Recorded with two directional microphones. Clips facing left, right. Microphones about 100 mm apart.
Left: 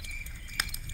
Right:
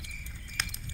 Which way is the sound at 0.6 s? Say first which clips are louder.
Left 1 dB; 5° left (ahead or behind).